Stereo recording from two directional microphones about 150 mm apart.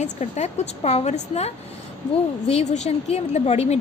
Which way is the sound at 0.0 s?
45° left (ahead or behind).